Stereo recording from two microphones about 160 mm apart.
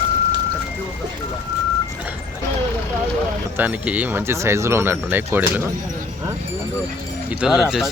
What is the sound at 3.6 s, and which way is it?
Speech, 10° right (ahead or behind).